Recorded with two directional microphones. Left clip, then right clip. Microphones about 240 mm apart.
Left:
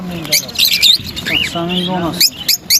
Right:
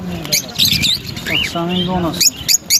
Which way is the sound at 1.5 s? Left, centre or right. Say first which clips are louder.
Left 1 dB; centre.